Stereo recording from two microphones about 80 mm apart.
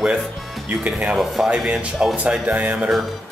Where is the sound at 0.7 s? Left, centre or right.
Centre.